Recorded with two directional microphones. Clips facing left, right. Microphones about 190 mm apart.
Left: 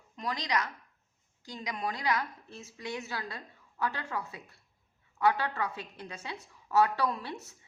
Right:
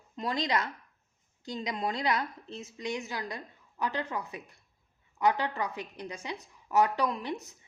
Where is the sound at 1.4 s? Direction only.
25° right (ahead or behind).